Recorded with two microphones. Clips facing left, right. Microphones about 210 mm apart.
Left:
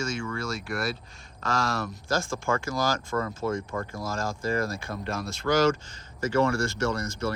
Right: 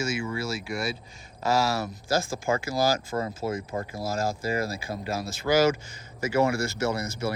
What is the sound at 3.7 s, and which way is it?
Speech, 25° right (ahead or behind).